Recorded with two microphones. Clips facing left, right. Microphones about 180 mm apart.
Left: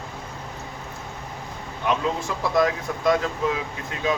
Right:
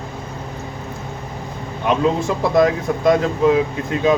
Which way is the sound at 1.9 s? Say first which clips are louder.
Right 7 dB; 25° right (ahead or behind).